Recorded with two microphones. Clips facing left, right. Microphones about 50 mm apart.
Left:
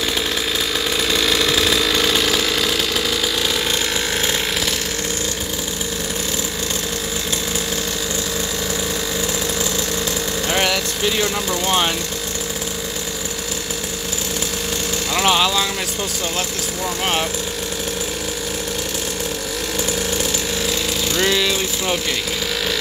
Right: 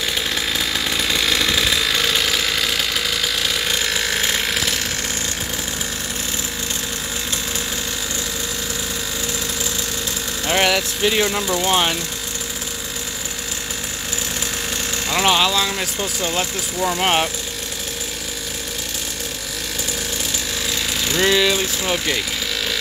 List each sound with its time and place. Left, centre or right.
10.4 s speech: centre
15.0 s speech: centre
16.8 s speech: centre
21.2 s speech: centre